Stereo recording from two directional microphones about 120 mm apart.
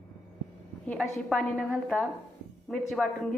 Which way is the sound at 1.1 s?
5° left (ahead or behind).